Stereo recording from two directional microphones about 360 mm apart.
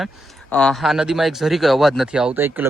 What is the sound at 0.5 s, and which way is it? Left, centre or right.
Speech, centre.